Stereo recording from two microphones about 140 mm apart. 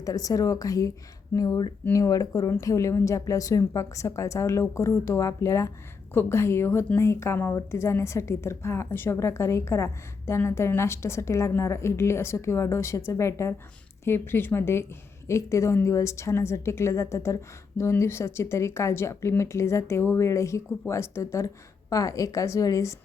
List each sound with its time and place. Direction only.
0.0 s a woman's voice: 25° left (ahead or behind)